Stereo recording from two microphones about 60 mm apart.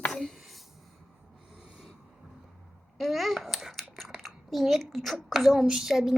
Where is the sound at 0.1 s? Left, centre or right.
Centre.